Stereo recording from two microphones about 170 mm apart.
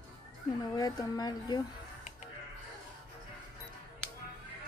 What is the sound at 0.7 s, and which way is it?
Speech, 20° left (ahead or behind).